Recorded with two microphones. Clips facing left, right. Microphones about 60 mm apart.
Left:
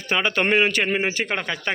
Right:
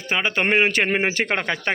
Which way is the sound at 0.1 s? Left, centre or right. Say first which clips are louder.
Even; centre.